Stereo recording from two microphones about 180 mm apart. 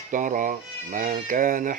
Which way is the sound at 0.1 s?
45° right (ahead or behind).